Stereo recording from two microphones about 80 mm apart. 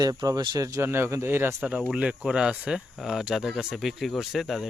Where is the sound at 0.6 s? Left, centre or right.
Right.